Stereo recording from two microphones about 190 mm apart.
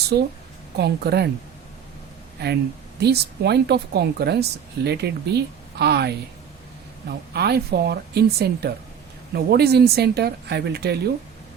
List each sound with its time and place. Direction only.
0.1 s a woman's voice: 50° right (ahead or behind)
3.0 s speech: 60° right (ahead or behind)
7.3 s speech: 55° right (ahead or behind)